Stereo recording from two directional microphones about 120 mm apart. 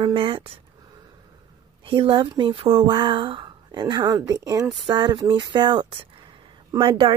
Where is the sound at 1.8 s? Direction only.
45° right (ahead or behind).